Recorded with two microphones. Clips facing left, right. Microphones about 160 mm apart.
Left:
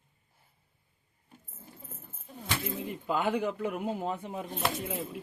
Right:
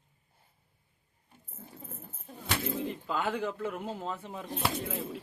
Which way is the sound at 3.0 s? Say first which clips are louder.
Left 5 dB; 15° left (ahead or behind).